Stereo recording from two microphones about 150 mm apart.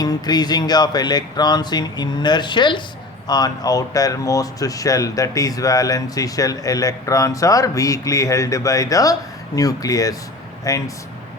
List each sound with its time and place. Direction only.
0.0 s speech: 25° left (ahead or behind)